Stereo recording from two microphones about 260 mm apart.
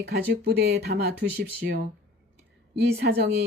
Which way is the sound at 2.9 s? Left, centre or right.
Right.